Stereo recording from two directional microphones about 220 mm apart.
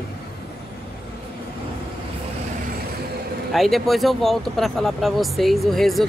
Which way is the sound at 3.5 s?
Centre (ahead or behind).